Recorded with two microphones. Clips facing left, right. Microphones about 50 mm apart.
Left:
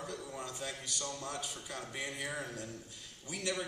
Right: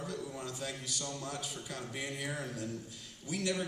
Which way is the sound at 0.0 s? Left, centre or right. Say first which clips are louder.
Right 2 dB; centre.